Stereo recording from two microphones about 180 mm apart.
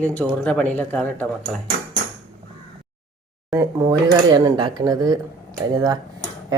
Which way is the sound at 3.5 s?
20° right (ahead or behind).